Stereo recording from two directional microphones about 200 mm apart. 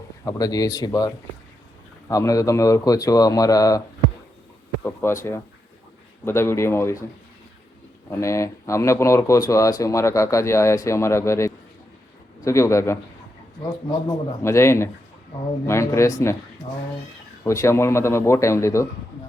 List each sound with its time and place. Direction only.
0.3 s speech: 15° left (ahead or behind)
8.1 s speech: 15° left (ahead or behind)
14.4 s speech: 15° left (ahead or behind)
17.4 s speech: 15° left (ahead or behind)